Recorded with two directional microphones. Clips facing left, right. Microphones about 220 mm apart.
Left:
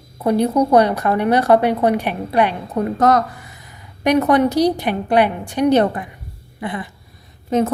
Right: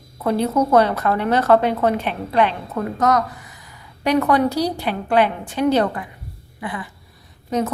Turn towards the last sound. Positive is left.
turn(degrees=25)  # may be behind; listen again after turning